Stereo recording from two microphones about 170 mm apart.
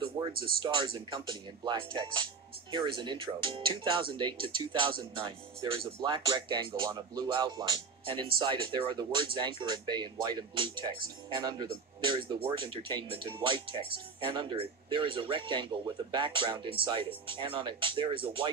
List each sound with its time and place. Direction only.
0.6 s speech: 30° right (ahead or behind)